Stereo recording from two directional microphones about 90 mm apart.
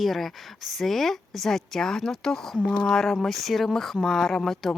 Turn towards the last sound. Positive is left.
turn(degrees=5)  # may be behind; listen again after turning